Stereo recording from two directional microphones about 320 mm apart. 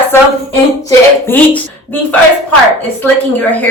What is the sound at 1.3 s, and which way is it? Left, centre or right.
Speech, centre.